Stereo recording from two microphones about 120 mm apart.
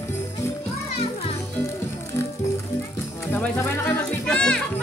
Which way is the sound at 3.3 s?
15° left (ahead or behind).